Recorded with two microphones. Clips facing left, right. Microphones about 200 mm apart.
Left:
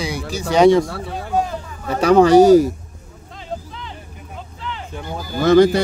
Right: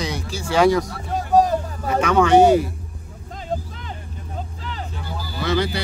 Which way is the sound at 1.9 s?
35° left (ahead or behind).